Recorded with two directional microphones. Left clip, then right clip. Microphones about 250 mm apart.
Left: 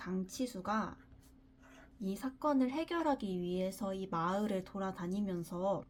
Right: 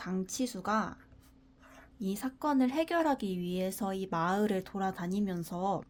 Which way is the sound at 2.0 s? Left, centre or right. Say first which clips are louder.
Right 3 dB; right.